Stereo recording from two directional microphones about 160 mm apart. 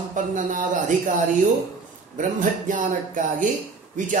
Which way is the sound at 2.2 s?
55° right (ahead or behind).